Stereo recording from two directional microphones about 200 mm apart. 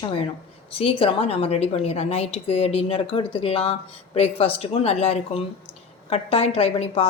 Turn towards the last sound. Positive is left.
turn(degrees=30)  # may be behind; listen again after turning